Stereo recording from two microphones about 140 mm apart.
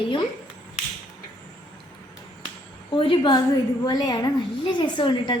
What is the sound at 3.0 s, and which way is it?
A child's voice, 35° left (ahead or behind).